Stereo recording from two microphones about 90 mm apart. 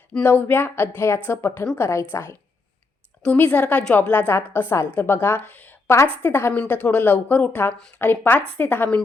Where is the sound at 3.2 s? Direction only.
15° left (ahead or behind).